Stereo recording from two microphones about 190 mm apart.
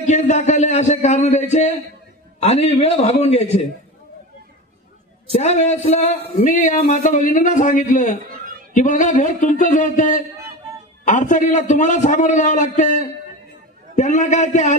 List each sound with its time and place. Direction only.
0.0 s speech: 40° left (ahead or behind)
5.3 s a man's voice: 35° left (ahead or behind)